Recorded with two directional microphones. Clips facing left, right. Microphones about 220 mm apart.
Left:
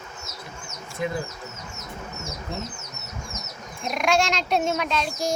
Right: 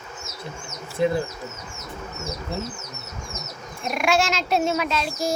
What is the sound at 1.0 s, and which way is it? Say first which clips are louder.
Speech: right 7 dB; 30° right (ahead or behind).